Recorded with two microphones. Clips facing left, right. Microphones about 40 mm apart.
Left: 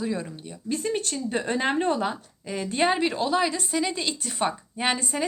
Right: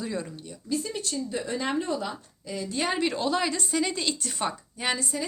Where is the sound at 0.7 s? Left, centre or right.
Left.